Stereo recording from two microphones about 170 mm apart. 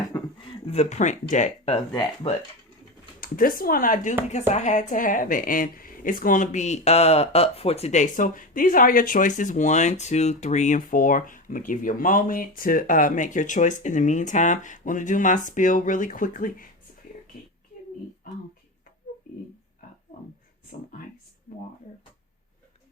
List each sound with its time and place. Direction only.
0.1 s a sound: 30° left (ahead or behind)
3.2 s a woman's voice: 55° left (ahead or behind)
20.7 s a woman's voice: 45° left (ahead or behind)